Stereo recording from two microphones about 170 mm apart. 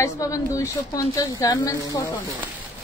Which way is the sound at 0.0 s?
20° left (ahead or behind).